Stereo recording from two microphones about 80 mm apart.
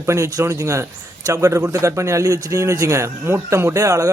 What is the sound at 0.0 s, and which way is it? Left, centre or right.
Speech, right.